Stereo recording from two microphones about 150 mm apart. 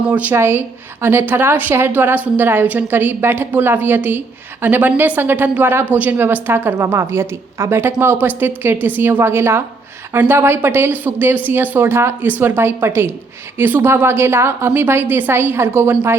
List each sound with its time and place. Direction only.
0.1 s a woman's voice: 10° right (ahead or behind)